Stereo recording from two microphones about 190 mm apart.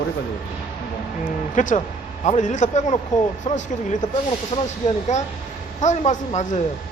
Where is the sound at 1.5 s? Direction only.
40° left (ahead or behind).